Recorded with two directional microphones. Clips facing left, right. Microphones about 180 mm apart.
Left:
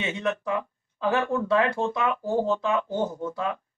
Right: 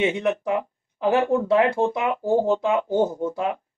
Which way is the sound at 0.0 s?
15° right (ahead or behind).